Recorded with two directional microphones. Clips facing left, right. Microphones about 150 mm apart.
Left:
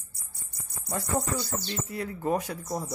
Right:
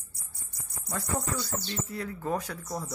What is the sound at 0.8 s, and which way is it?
Speech, 25° left (ahead or behind).